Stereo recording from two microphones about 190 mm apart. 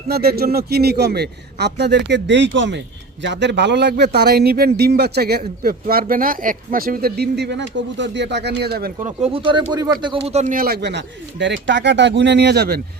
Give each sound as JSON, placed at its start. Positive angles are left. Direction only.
{"t": 0.1, "sound": "speech", "side_deg": -55}
{"t": 9.3, "sound": "speech", "side_deg": -25}